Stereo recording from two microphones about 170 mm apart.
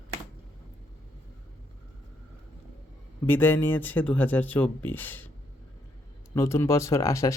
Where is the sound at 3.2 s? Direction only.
10° left (ahead or behind).